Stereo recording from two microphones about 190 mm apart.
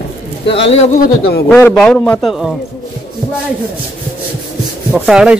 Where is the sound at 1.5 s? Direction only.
10° left (ahead or behind).